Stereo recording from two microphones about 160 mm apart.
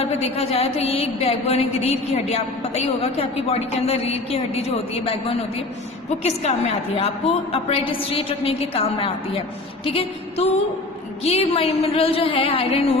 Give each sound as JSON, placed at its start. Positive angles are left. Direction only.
{"t": 0.0, "sound": "a woman's voice", "side_deg": 40}